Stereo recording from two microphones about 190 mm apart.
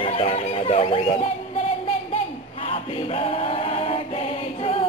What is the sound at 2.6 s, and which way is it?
Choir, 30° left (ahead or behind).